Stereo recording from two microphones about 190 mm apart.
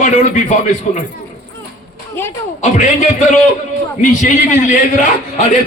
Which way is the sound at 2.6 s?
40° left (ahead or behind).